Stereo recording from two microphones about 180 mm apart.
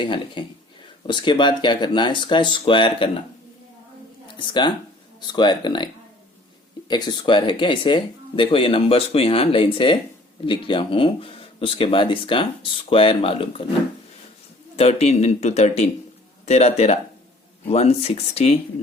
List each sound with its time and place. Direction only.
0.0 s speech: 25° left (ahead or behind)
4.4 s speech: 25° left (ahead or behind)
14.8 s speech: 35° left (ahead or behind)